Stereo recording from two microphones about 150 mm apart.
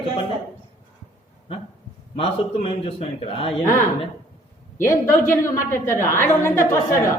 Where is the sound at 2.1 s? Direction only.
40° left (ahead or behind).